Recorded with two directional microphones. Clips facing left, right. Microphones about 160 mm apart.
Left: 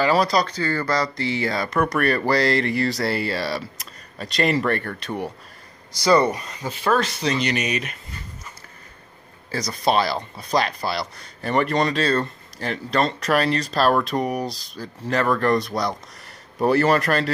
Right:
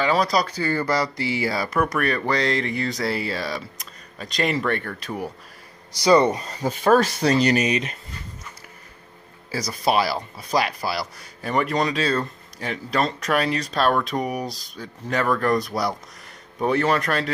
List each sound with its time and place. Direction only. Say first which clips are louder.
0.0 s speech: left 2 dB; centre (ahead or behind)
5.9 s speech: right 1 dB; 15° right (ahead or behind)
6.3 s speech: right 4 dB; 35° right (ahead or behind)
9.5 s speech: left 1 dB; 5° right (ahead or behind)